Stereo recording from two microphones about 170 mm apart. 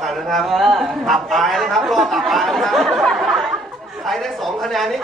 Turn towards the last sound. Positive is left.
turn(degrees=0)  # may be behind; listen again after turning